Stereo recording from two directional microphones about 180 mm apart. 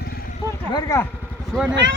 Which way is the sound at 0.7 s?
20° left (ahead or behind).